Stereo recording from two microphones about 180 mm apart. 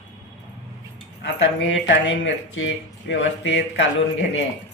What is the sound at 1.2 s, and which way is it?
Speech, 75° left (ahead or behind).